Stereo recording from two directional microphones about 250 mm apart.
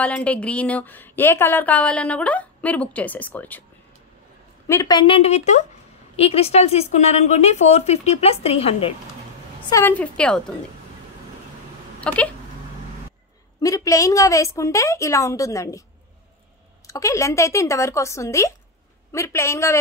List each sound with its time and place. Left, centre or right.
0.0 s speech: centre
4.6 s a woman's voice: centre
9.7 s a woman's voice: centre
12.0 s speech: centre
13.6 s speech: centre
16.8 s speech: centre